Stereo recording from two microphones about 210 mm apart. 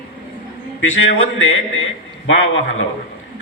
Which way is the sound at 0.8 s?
70° left (ahead or behind).